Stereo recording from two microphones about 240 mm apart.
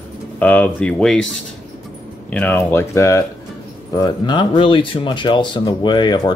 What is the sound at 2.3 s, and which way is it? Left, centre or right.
Speech, centre.